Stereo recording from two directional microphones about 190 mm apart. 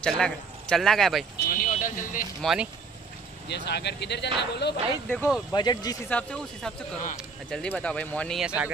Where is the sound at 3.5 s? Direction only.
60° left (ahead or behind).